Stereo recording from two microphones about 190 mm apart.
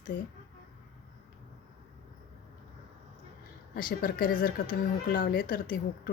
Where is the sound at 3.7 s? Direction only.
50° left (ahead or behind).